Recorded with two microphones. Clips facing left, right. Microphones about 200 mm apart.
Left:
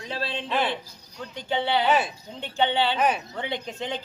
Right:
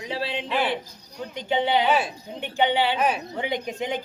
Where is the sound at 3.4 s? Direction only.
15° right (ahead or behind).